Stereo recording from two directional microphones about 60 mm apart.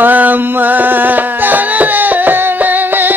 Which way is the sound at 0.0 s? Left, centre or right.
Right.